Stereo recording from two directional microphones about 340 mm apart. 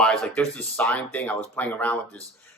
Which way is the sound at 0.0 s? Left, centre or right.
Centre.